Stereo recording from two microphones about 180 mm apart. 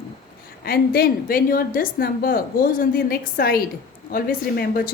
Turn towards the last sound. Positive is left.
turn(degrees=55)  # may be behind; listen again after turning